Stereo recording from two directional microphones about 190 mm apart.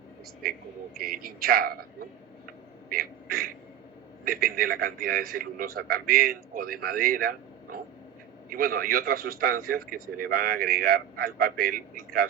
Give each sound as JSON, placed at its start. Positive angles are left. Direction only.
{"t": 0.9, "sound": "a man's voice", "side_deg": -50}
{"t": 2.9, "sound": "a sound", "side_deg": -50}
{"t": 4.3, "sound": "a man's voice", "side_deg": -50}